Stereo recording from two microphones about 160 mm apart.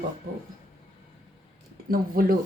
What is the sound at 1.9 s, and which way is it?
Speech, 65° right (ahead or behind).